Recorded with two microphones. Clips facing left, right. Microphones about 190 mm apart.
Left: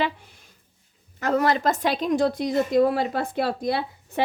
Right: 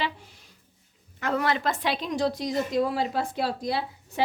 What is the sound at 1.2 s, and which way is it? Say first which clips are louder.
A woman's voice: left 5 dB; 40° left (ahead or behind).